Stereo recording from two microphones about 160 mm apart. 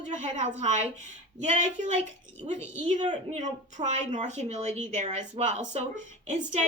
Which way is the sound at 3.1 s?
45° right (ahead or behind).